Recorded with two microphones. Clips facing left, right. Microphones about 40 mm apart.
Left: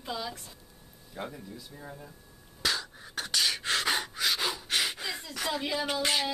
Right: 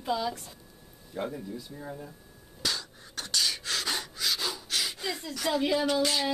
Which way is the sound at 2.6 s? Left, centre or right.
Centre.